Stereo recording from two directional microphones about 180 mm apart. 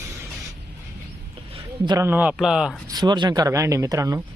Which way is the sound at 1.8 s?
20° right (ahead or behind).